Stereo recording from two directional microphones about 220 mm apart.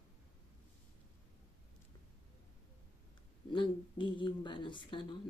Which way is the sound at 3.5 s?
20° left (ahead or behind).